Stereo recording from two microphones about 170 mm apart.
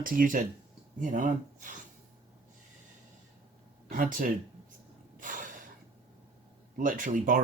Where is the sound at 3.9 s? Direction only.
55° right (ahead or behind).